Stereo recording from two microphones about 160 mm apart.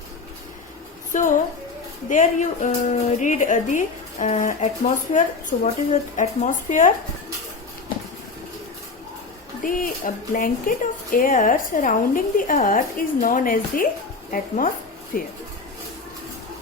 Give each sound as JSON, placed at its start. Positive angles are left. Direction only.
{"t": 1.1, "sound": "a woman's voice", "side_deg": 55}
{"t": 9.6, "sound": "speech", "side_deg": 60}